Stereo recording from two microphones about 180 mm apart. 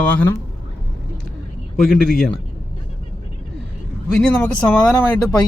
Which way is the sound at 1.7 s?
Centre (ahead or behind).